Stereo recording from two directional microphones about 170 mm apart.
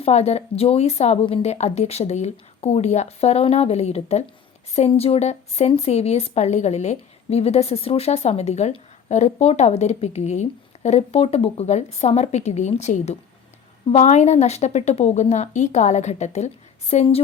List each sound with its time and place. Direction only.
0.0 s speech: 40° left (ahead or behind)